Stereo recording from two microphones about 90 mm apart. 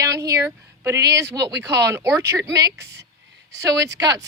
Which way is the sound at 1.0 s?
35° right (ahead or behind).